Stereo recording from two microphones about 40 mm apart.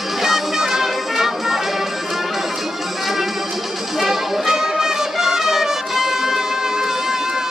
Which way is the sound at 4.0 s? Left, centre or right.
Centre.